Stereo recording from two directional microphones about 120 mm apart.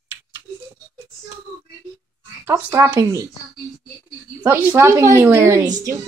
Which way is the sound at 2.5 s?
15° right (ahead or behind).